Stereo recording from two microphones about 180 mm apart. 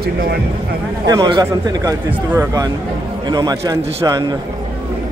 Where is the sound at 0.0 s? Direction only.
60° right (ahead or behind).